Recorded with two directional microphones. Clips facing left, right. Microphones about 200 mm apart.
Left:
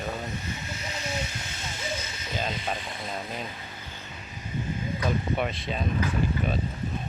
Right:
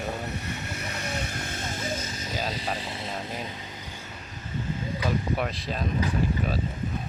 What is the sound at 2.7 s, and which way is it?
Speech, 30° right (ahead or behind).